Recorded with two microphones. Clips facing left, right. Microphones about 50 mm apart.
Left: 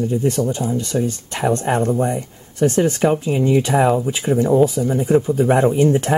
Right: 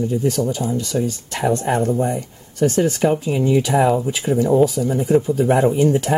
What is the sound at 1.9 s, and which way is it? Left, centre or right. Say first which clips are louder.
Speech: left 1 dB; left.